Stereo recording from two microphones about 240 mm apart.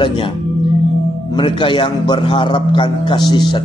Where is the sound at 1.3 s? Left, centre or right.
Centre.